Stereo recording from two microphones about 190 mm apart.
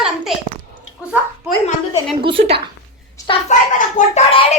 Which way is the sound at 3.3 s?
40° left (ahead or behind).